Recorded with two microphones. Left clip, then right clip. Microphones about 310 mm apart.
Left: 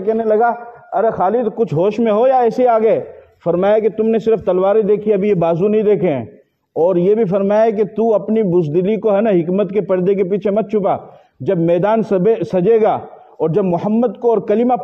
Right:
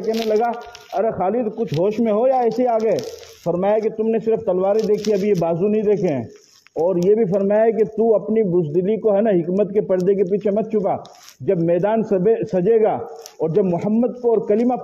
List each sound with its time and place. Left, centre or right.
0.3 s a man's voice: left